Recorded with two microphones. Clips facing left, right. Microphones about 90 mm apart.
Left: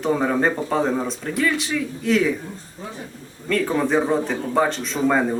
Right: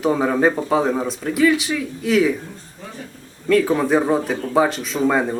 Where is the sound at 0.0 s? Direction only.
5° right (ahead or behind).